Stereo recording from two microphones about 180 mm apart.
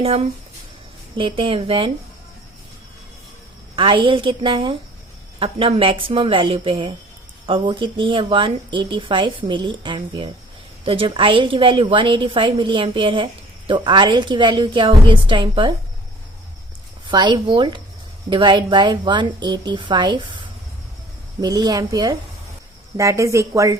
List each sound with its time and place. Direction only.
1.1 s speech: 30° right (ahead or behind)
3.8 s a woman's voice: 25° right (ahead or behind)
17.1 s a woman's voice: 25° right (ahead or behind)
21.4 s a woman's voice: 20° right (ahead or behind)